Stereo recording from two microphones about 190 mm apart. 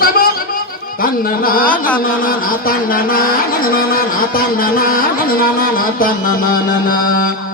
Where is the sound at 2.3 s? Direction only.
50° left (ahead or behind).